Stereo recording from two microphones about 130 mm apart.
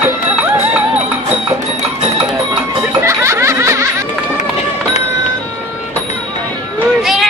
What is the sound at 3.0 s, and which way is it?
Snicker, 20° right (ahead or behind).